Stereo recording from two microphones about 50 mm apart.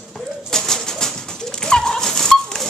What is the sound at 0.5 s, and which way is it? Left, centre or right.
Bird, centre.